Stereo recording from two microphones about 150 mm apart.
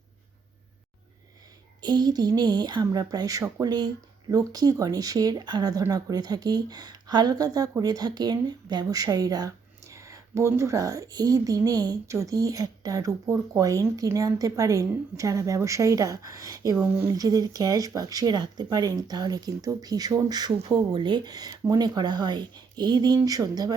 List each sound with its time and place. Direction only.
1.8 s a woman's voice: 30° right (ahead or behind)